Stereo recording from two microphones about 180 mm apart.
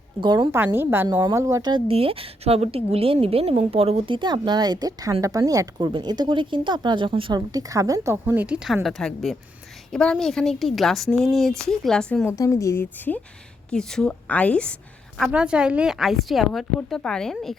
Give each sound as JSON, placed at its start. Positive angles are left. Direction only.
{"t": 0.2, "sound": "speech", "side_deg": -25}
{"t": 0.5, "sound": "a woman's voice", "side_deg": -10}
{"t": 12.4, "sound": "a woman's voice", "side_deg": 15}
{"t": 15.2, "sound": "a woman's voice", "side_deg": -5}